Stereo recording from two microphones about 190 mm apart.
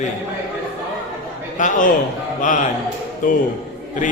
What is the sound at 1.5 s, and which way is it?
A man's voice, 40° left (ahead or behind).